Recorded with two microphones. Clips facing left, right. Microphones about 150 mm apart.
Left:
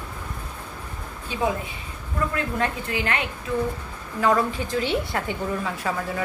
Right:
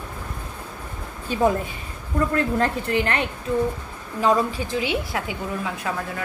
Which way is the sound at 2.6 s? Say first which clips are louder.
Right 4 dB; 35° right (ahead or behind).